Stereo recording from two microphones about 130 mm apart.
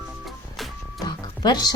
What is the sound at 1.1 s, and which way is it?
Music, 35° left (ahead or behind).